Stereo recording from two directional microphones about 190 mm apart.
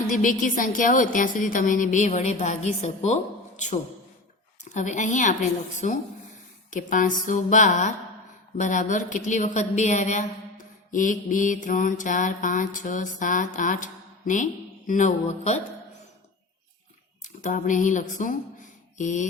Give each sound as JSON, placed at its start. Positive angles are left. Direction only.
{"t": 0.1, "sound": "mantra", "side_deg": 45}
{"t": 4.7, "sound": "a woman's voice", "side_deg": 40}
{"t": 6.7, "sound": "mantra", "side_deg": 45}
{"t": 8.5, "sound": "a woman's voice", "side_deg": 40}
{"t": 10.9, "sound": "mantra", "side_deg": 45}
{"t": 14.8, "sound": "a woman's voice", "side_deg": 40}
{"t": 17.2, "sound": "mantra", "side_deg": 40}
{"t": 18.9, "sound": "a woman's voice", "side_deg": 40}